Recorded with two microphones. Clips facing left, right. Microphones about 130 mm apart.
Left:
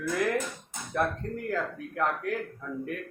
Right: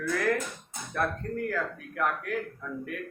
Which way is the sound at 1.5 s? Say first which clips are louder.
Left 1 dB; 25° left (ahead or behind).